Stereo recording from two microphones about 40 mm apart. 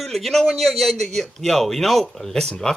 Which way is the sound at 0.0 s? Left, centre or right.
Centre.